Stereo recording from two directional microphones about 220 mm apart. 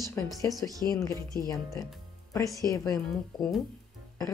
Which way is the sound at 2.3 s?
15° left (ahead or behind).